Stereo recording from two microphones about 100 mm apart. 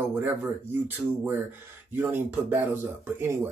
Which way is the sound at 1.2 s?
20° right (ahead or behind).